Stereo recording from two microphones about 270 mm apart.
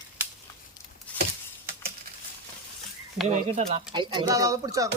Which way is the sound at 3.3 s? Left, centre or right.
Right.